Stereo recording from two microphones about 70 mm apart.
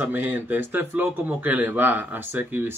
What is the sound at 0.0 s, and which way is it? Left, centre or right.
Speech, right.